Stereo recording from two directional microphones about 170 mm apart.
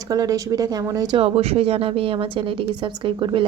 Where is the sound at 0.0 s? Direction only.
20° right (ahead or behind).